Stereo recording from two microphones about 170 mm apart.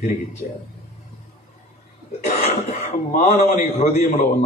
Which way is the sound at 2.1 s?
45° left (ahead or behind).